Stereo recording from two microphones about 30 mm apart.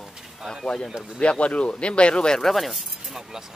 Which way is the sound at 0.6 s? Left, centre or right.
Left.